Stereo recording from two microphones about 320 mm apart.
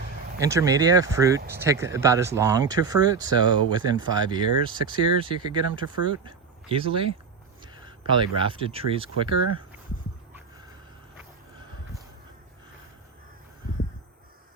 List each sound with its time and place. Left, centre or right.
0.3 s speech: centre